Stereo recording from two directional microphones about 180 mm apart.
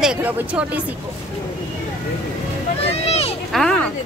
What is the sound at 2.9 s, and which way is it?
Speech, 35° left (ahead or behind).